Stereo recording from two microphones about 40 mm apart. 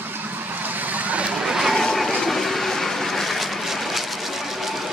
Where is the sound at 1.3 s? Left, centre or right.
Centre.